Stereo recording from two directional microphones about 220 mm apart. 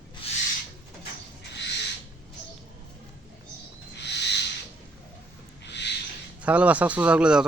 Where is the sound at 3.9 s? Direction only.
50° left (ahead or behind).